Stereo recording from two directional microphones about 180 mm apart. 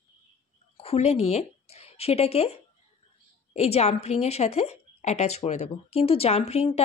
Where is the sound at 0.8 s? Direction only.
35° left (ahead or behind).